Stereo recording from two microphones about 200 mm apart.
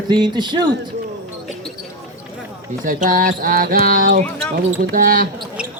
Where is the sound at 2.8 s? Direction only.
40° right (ahead or behind).